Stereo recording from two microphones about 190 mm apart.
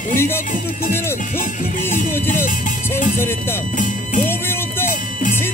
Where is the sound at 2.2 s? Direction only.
45° left (ahead or behind).